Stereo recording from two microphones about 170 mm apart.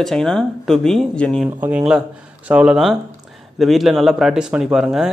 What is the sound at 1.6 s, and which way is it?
Speech, 5° right (ahead or behind).